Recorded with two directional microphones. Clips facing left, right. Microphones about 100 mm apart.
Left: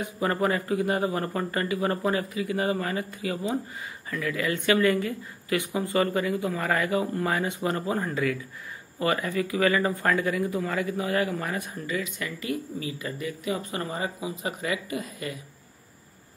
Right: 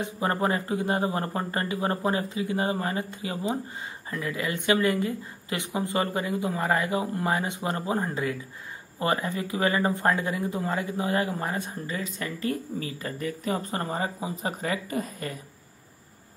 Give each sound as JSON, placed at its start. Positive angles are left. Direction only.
{"t": 0.0, "sound": "a woman's voice", "side_deg": -25}